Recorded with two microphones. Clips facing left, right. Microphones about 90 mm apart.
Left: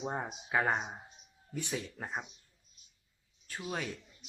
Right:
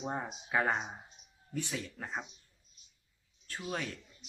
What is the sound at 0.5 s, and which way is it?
Speech, 20° left (ahead or behind).